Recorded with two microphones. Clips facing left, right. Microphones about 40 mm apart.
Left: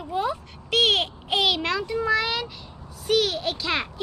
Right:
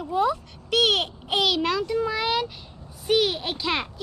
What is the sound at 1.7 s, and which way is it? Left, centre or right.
Speech, centre.